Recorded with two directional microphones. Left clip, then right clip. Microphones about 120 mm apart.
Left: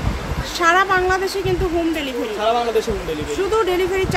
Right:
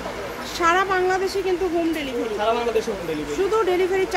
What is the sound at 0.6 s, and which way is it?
Speech, 5° left (ahead or behind).